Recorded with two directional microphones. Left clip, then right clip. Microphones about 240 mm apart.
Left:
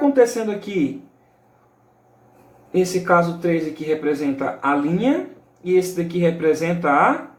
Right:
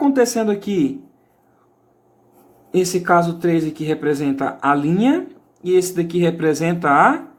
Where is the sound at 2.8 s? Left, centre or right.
Right.